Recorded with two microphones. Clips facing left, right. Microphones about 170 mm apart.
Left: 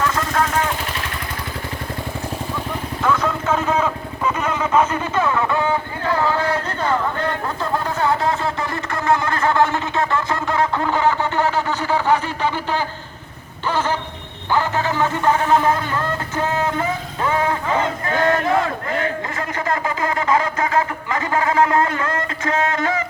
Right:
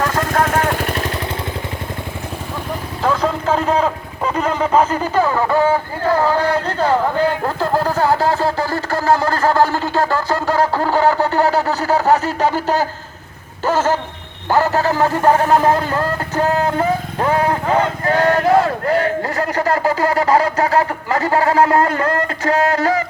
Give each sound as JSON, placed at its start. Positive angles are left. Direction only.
{"t": 0.0, "sound": "vehicle", "side_deg": -50}
{"t": 3.0, "sound": "speech", "side_deg": -30}
{"t": 13.7, "sound": "a sound", "side_deg": -40}
{"t": 14.5, "sound": "speech", "side_deg": -40}